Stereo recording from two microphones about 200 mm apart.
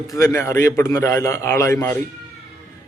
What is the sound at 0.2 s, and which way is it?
A man's voice, 15° left (ahead or behind).